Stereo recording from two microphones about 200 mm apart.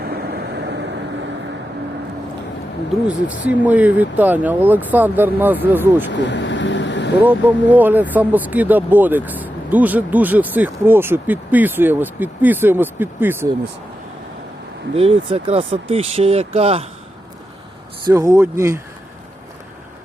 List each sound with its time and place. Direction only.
0.0 s vehicle: 55° right (ahead or behind)
3.1 s speech: 5° right (ahead or behind)
6.1 s vehicle: 60° left (ahead or behind)
7.2 s speech: 10° right (ahead or behind)
14.9 s speech: 30° right (ahead or behind)
18.1 s speech: 15° right (ahead or behind)